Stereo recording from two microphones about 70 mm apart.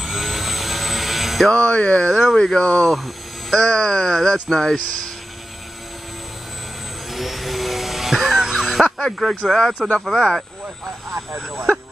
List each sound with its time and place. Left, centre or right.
0.0 s jet engine: centre
1.5 s speech: centre
2.0 s speech: centre
2.3 s speech: centre
3.0 s a sound: centre
3.6 s speech: centre
7.1 s vacuum cleaner: centre
8.9 s speech: centre
11.1 s speech: centre